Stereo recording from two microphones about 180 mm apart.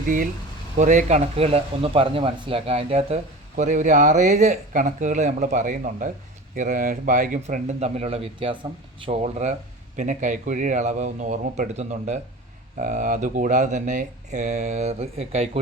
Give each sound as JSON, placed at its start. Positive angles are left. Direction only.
{"t": 0.8, "sound": "speech", "side_deg": -40}